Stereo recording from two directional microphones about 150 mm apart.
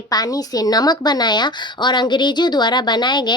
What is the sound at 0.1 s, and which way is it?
Speech, 25° left (ahead or behind).